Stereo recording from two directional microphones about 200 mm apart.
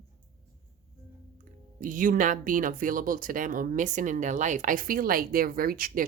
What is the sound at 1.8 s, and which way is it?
Speech, 45° right (ahead or behind).